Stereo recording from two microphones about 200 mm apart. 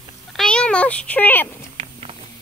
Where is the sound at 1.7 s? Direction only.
30° right (ahead or behind).